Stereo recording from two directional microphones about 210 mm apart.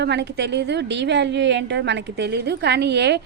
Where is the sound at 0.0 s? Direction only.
55° right (ahead or behind).